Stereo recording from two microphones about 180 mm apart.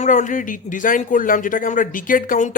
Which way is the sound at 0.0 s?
45° left (ahead or behind).